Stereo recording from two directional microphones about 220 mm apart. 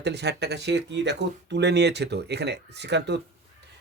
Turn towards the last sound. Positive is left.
turn(degrees=-50)  # may be behind; listen again after turning